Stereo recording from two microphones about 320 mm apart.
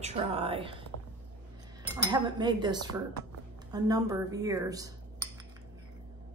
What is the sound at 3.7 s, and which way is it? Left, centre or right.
Cutlery, centre.